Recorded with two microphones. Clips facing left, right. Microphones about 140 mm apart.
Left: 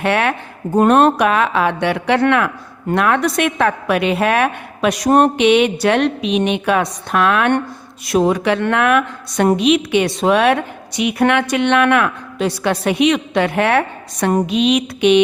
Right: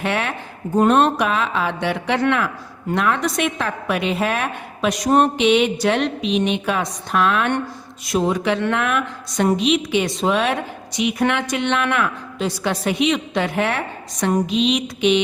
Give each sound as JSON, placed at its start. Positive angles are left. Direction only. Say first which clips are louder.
{"t": 0.0, "sound": "a woman's voice", "louder": "left 6 dB", "side_deg": 65}